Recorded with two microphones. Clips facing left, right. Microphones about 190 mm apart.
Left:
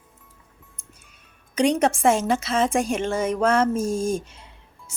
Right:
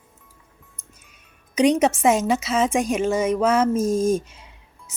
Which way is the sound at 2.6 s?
35° left (ahead or behind).